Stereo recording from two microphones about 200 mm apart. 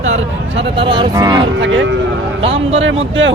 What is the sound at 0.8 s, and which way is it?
Speech, 25° right (ahead or behind).